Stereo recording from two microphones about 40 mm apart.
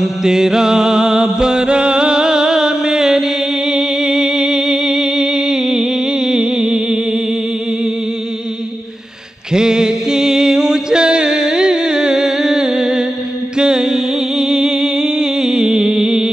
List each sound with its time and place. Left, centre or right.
0.0 s music: centre
6.6 s a sound: centre
9.5 s music: centre